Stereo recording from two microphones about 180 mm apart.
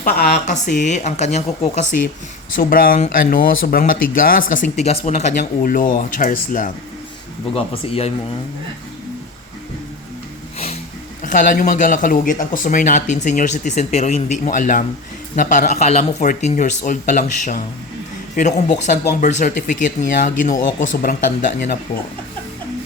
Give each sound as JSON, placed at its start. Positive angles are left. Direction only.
{"t": 0.0, "sound": "speech", "side_deg": 55}
{"t": 0.5, "sound": "speech", "side_deg": 40}
{"t": 2.6, "sound": "speech", "side_deg": 55}
{"t": 7.5, "sound": "speech", "side_deg": 35}
{"t": 11.2, "sound": "speech", "side_deg": 45}